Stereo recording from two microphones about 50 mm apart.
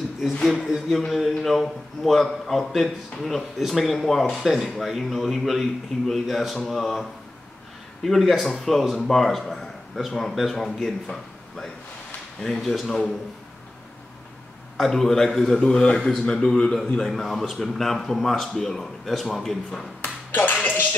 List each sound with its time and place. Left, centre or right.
0.4 s a man's voice: centre
1.0 s a man's voice: centre
14.8 s a man's voice: centre
15.6 s a man's voice: centre
17.0 s a man's voice: centre
20.0 s dishes: left